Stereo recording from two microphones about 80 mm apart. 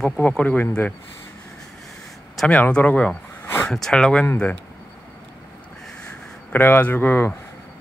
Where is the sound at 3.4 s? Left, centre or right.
Left.